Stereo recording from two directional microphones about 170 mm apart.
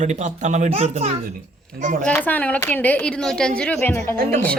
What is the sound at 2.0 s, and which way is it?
A woman's voice, 10° left (ahead or behind).